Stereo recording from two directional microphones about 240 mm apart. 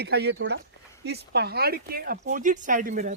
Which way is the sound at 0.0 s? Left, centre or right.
Right.